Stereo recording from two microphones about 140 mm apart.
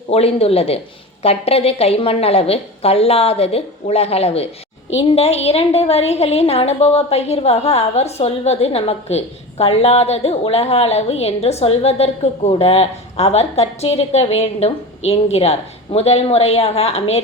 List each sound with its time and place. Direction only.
0.1 s a woman's voice: 45° left (ahead or behind)